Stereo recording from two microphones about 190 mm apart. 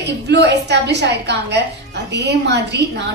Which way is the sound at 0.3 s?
65° right (ahead or behind).